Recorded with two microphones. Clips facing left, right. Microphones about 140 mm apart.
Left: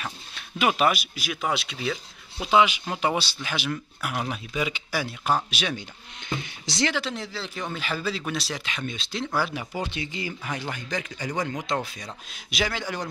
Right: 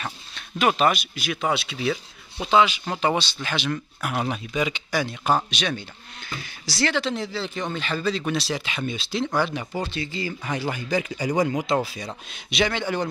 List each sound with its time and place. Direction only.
0.6 s speech: 10° left (ahead or behind)
2.5 s speech: 15° left (ahead or behind)
6.2 s speech: 20° left (ahead or behind)
6.9 s speech: 5° left (ahead or behind)
9.9 s speech: 15° left (ahead or behind)
10.4 s speech: centre (ahead or behind)